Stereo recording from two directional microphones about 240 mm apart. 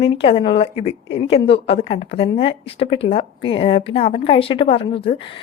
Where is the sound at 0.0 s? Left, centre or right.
Left.